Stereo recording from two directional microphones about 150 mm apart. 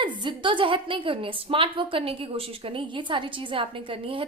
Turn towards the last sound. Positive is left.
turn(degrees=-35)  # may be behind; listen again after turning